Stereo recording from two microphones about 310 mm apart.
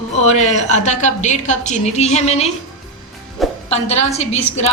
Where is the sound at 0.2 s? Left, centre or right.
Left.